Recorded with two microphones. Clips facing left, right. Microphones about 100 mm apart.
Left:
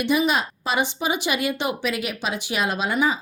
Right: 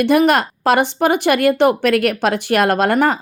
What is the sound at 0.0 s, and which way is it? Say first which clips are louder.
A woman's voice: right 8 dB; 70° right (ahead or behind).